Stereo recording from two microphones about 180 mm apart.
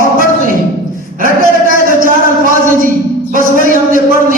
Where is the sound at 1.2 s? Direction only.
50° right (ahead or behind).